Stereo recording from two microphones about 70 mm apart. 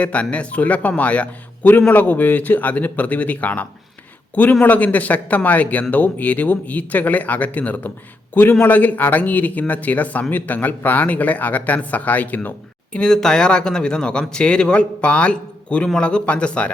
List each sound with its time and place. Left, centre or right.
0.0 s speech: centre
13.0 s speech: centre